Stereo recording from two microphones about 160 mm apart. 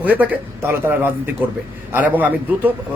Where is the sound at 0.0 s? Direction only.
10° right (ahead or behind).